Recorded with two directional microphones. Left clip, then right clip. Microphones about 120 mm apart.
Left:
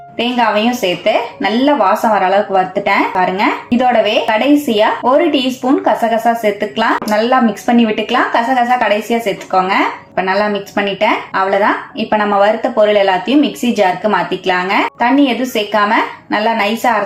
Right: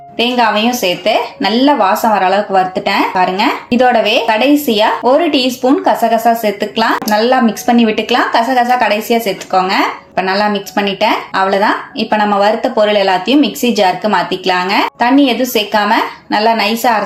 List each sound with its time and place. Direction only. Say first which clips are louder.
0.2 s a woman's voice: right 2 dB; 30° right (ahead or behind)